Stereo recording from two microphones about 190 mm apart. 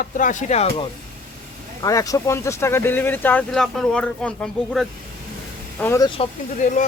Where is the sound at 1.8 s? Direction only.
20° left (ahead or behind).